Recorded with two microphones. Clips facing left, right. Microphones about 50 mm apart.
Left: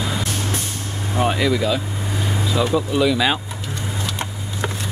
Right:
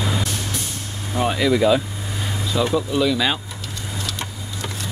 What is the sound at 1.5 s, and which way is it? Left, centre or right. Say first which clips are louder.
Speech: right 4 dB; centre.